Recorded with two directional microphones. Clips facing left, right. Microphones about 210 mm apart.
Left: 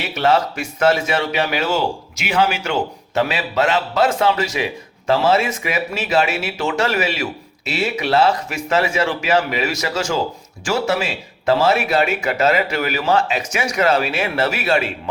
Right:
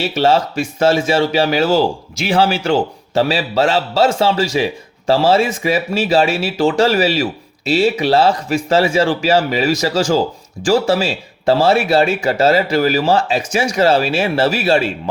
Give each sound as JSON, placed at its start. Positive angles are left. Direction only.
{"t": 0.0, "sound": "a man's voice", "side_deg": -30}